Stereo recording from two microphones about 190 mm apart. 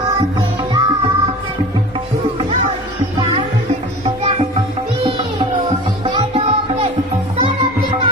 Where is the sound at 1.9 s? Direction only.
30° right (ahead or behind).